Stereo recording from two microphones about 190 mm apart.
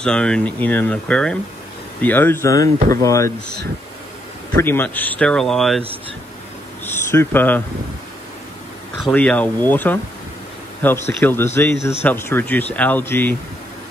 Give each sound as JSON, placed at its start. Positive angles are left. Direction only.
{"t": 0.0, "sound": "speech", "side_deg": 5}
{"t": 4.6, "sound": "speech", "side_deg": 10}
{"t": 6.9, "sound": "speech", "side_deg": 10}
{"t": 8.9, "sound": "speech", "side_deg": 5}